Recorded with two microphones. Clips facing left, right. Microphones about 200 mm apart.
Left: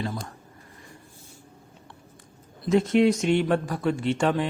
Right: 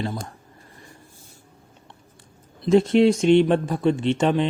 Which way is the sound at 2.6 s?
30° right (ahead or behind).